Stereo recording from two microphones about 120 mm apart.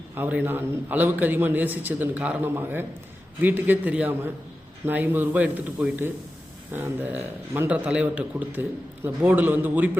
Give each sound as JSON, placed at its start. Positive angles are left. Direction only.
{"t": 0.2, "sound": "a man's voice", "side_deg": -15}